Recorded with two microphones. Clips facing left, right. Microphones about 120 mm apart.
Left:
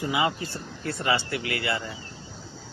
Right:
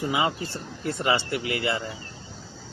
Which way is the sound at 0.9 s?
25° right (ahead or behind).